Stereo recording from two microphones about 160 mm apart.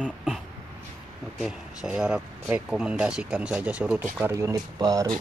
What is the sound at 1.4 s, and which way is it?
Speech, 5° right (ahead or behind).